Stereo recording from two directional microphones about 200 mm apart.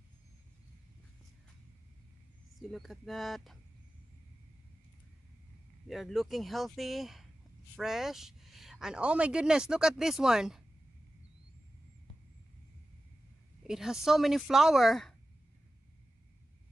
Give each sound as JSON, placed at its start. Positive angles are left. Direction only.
{"t": 2.7, "sound": "speech", "side_deg": 0}
{"t": 5.9, "sound": "speech", "side_deg": 0}
{"t": 13.7, "sound": "speech", "side_deg": -5}